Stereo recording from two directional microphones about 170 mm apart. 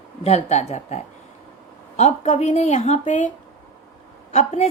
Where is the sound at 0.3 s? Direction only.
40° left (ahead or behind).